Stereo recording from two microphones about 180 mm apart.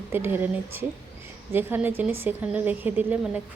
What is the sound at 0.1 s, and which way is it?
A woman's voice, 10° right (ahead or behind).